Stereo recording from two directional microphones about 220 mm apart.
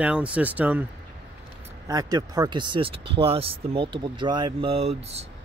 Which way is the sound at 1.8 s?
15° right (ahead or behind).